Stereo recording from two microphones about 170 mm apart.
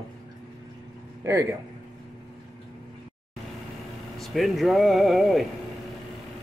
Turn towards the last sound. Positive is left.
turn(degrees=0)  # may be behind; listen again after turning